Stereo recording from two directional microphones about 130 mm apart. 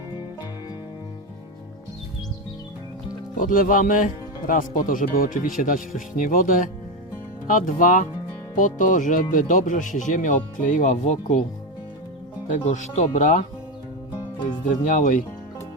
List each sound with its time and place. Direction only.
3.3 s speech: 90° left; by 11.3 s 65° left (ahead or behind)
12.6 s speech: 65° left (ahead or behind)
14.7 s speech: 80° left